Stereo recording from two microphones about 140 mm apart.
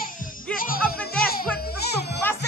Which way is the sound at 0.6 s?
90° left.